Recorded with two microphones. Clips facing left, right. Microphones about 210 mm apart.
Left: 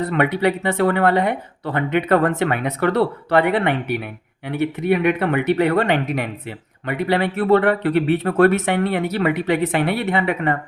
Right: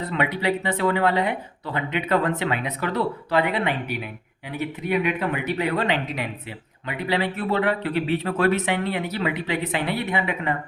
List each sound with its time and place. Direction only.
0.1 s speech: 55° left (ahead or behind)